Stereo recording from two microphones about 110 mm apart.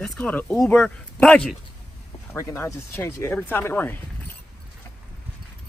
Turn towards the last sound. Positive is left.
turn(degrees=20)  # may be behind; listen again after turning